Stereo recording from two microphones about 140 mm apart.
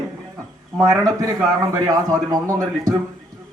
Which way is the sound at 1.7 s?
25° right (ahead or behind).